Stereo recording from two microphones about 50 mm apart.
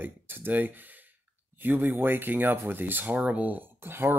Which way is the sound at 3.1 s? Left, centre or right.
Right.